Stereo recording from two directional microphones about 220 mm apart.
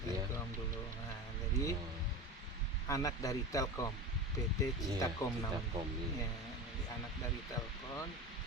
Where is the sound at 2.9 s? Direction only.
15° left (ahead or behind).